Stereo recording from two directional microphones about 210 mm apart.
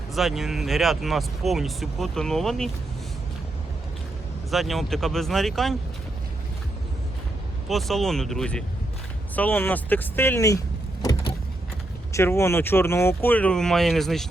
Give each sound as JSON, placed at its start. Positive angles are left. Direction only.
{"t": 0.1, "sound": "speech", "side_deg": 0}
{"t": 4.5, "sound": "speech", "side_deg": 0}
{"t": 7.7, "sound": "speech", "side_deg": 0}
{"t": 11.0, "sound": "power windows", "side_deg": 20}
{"t": 12.1, "sound": "speech", "side_deg": 10}